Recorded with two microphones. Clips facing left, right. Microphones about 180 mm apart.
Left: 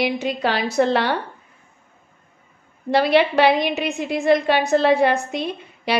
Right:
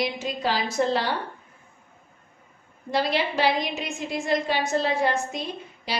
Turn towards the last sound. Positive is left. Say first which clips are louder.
# left 8 dB
turn(degrees=65)  # may be behind; listen again after turning